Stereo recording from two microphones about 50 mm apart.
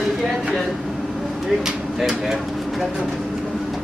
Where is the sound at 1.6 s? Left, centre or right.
Centre.